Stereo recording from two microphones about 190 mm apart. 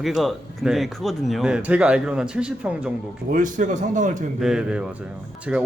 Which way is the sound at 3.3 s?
45° right (ahead or behind).